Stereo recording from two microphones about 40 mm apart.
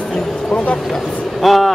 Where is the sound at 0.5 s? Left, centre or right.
Left.